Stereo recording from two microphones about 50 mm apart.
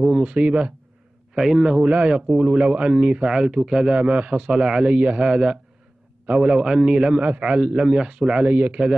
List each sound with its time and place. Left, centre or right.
0.0 s a man's voice: centre
1.3 s a man's voice: centre; by 8.8 s right